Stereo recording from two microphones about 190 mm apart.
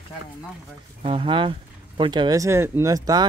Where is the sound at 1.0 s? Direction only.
25° right (ahead or behind).